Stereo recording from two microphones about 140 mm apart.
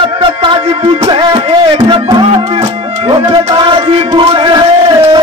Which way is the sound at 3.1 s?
35° right (ahead or behind).